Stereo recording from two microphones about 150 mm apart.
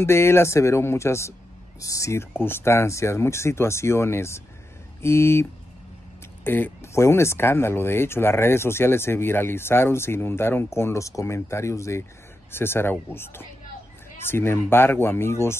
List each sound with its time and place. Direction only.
0.0 s speech: 15° left (ahead or behind)